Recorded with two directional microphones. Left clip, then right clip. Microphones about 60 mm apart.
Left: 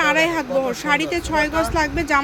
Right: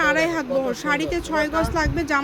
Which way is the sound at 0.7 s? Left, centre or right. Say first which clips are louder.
Left 3 dB; centre.